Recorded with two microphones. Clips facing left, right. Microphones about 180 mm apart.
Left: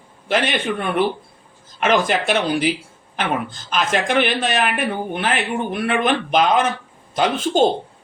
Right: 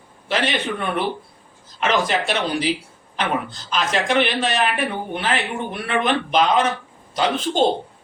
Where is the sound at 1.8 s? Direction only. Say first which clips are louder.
Left 3 dB; 50° left (ahead or behind).